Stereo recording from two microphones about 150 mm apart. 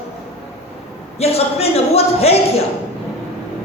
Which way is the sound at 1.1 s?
45° left (ahead or behind).